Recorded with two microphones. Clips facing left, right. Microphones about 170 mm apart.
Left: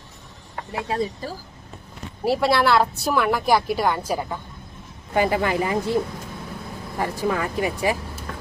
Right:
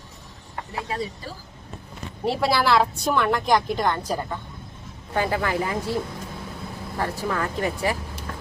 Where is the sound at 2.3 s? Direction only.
Centre (ahead or behind); by 5.8 s 20° left (ahead or behind).